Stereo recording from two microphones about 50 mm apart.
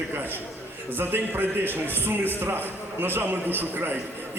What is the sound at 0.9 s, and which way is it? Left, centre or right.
A man's voice, right.